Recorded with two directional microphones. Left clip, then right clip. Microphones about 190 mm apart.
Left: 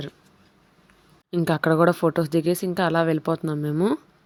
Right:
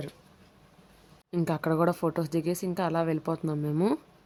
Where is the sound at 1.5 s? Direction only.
15° left (ahead or behind).